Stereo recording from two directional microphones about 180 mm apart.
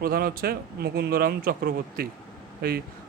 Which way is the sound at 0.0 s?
55° right (ahead or behind).